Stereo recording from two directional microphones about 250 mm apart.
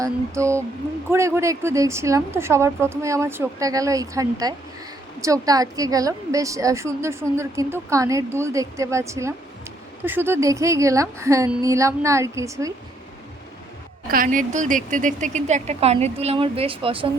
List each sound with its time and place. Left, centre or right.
0.0 s a woman's voice: centre
14.1 s a woman's voice: right